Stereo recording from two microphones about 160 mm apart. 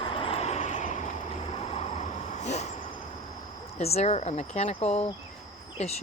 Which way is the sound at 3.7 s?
40° left (ahead or behind).